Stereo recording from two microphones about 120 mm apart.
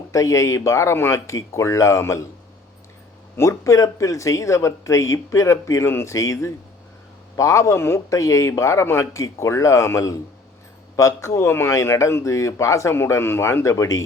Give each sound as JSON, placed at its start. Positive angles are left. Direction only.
{"t": 0.1, "sound": "speech", "side_deg": 25}
{"t": 3.3, "sound": "speech", "side_deg": 20}